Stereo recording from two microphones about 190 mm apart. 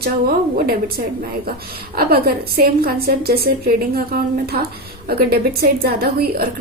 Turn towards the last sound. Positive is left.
turn(degrees=-55)  # may be behind; listen again after turning